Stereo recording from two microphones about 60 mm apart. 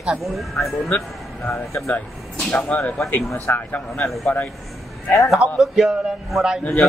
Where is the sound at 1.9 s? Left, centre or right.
Left.